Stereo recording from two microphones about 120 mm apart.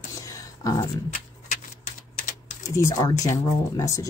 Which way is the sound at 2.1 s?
90° left.